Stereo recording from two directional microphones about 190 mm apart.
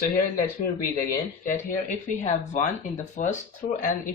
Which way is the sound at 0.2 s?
45° left (ahead or behind).